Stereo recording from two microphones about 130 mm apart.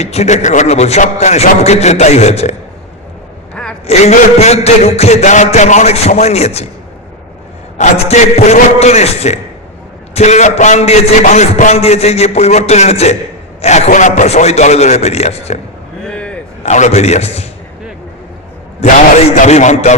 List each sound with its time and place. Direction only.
0.0 s a man's voice: 55° left (ahead or behind)
3.5 s gasp: 5° left (ahead or behind)
3.8 s a man's voice: 55° left (ahead or behind)
7.8 s a man's voice: 60° left (ahead or behind)
16.0 s a sound: 10° left (ahead or behind)
16.6 s a man's voice: 60° left (ahead or behind)
18.8 s a man's voice: 55° left (ahead or behind)